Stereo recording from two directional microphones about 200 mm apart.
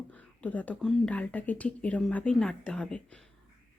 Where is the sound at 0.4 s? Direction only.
5° left (ahead or behind).